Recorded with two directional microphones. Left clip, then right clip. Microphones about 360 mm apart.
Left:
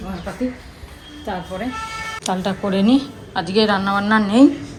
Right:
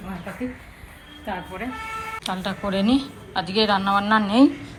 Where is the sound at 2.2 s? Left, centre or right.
Centre.